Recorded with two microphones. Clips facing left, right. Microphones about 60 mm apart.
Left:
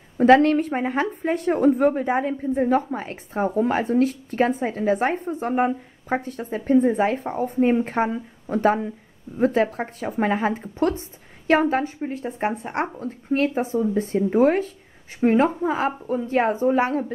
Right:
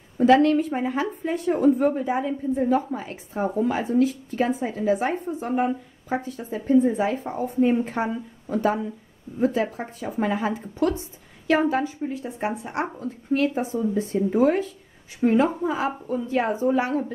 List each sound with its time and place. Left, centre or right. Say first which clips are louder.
0.2 s a woman's voice: left 2 dB; left